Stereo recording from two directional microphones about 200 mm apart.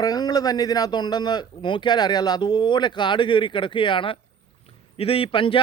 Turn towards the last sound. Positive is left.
turn(degrees=25)  # may be behind; listen again after turning